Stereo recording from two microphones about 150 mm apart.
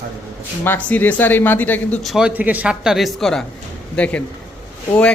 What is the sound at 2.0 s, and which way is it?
A man's voice, centre (ahead or behind).